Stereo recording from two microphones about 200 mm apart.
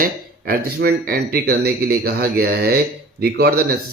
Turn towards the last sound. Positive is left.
turn(degrees=-50)  # may be behind; listen again after turning